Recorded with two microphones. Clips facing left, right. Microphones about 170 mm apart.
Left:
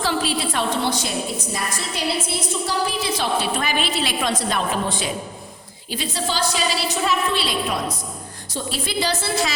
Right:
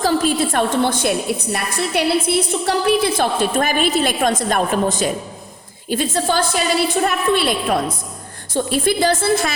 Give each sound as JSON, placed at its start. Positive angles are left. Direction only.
{"t": 0.0, "sound": "a woman's voice", "side_deg": -45}